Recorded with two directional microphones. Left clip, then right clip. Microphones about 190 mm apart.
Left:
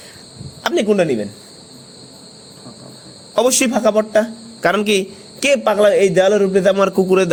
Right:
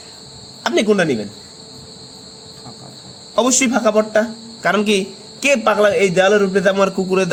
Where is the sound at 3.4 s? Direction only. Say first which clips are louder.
Left 1 dB; 35° left (ahead or behind).